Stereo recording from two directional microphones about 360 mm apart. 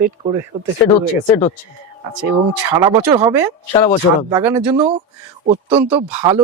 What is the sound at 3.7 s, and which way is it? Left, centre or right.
Speech, centre.